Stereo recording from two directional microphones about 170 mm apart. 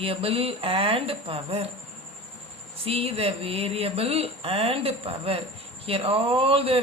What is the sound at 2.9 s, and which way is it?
Mantra, 35° right (ahead or behind).